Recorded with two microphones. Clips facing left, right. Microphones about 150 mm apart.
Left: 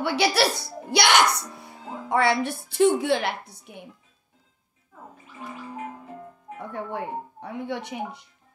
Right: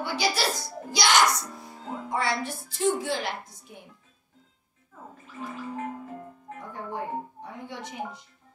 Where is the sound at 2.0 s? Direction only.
65° left (ahead or behind).